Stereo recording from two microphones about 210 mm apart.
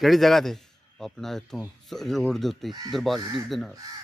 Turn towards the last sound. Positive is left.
turn(degrees=0)  # may be behind; listen again after turning